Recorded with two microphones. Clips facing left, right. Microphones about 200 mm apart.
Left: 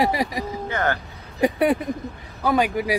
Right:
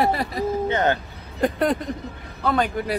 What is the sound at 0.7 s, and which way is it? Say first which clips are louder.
Speech: right 1 dB; 20° right (ahead or behind).